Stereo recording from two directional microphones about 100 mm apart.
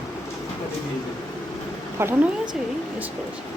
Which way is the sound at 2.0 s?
25° right (ahead or behind).